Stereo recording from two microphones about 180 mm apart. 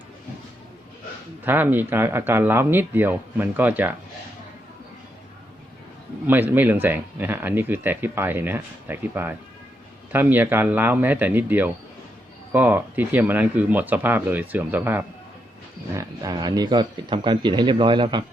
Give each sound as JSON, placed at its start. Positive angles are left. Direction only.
{"t": 1.5, "sound": "speech", "side_deg": -10}
{"t": 6.2, "sound": "speech", "side_deg": -10}
{"t": 16.0, "sound": "speech", "side_deg": -20}